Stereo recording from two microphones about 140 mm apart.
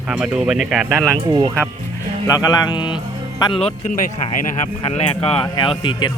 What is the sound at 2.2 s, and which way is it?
Speech, 25° left (ahead or behind).